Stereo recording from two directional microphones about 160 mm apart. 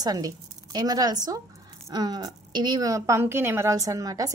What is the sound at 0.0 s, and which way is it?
A woman's voice, 25° right (ahead or behind).